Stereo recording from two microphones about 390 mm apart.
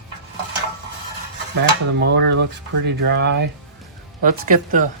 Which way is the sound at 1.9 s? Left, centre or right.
Right.